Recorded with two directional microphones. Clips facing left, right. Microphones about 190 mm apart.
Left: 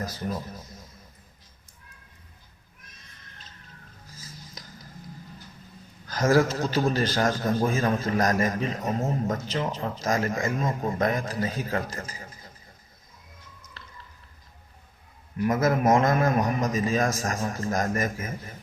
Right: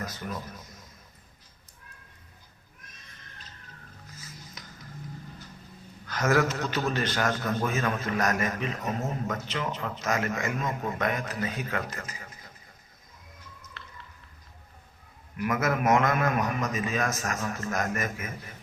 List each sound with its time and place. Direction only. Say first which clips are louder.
0.0 s a man's voice: left 4 dB; 35° left (ahead or behind)
4.6 s music: left 1 dB; 35° left (ahead or behind)
6.1 s a man's voice: left 4 dB; 35° left (ahead or behind)
15.4 s a man's voice: left 4 dB; 30° left (ahead or behind)